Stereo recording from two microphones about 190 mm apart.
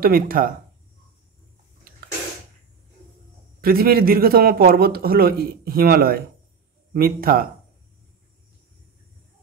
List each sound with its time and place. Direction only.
0.0 s a man's voice: 50° right (ahead or behind)
3.6 s a man's voice: 50° right (ahead or behind)